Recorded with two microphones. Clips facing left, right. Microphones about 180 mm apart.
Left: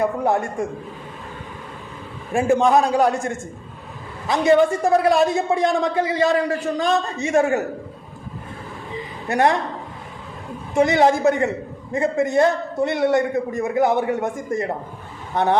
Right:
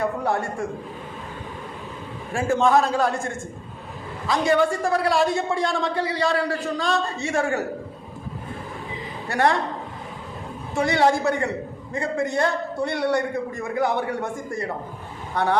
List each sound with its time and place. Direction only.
0.0 s a man's voice: 20° left (ahead or behind)
2.3 s a man's voice: 15° left (ahead or behind)
9.3 s a man's voice: 20° left (ahead or behind)
10.8 s a man's voice: 20° left (ahead or behind)